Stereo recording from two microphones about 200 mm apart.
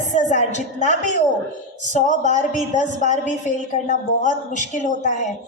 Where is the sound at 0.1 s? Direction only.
40° left (ahead or behind).